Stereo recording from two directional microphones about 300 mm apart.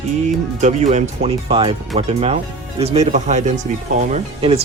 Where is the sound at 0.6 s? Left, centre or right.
Right.